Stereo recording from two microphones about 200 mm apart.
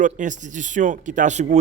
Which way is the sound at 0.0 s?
40° right (ahead or behind).